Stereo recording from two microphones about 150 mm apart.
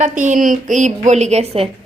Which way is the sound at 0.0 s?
55° right (ahead or behind).